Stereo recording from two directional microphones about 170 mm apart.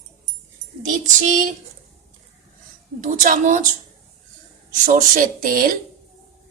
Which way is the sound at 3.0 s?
50° right (ahead or behind).